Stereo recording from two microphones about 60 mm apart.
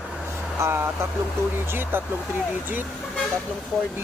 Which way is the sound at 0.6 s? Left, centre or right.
Right.